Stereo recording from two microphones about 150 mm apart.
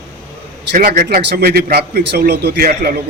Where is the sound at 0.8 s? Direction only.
75° right (ahead or behind).